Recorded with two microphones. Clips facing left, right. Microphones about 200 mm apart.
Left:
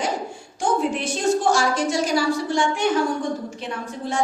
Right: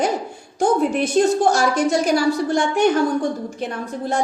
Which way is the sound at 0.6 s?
60° right (ahead or behind).